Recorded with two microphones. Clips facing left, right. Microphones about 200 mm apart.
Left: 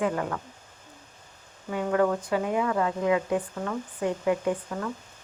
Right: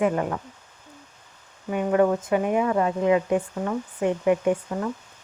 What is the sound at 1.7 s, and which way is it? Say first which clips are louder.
Speech: right 4 dB; 20° right (ahead or behind).